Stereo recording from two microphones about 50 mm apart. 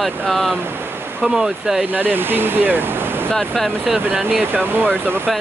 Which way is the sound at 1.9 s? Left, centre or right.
Right.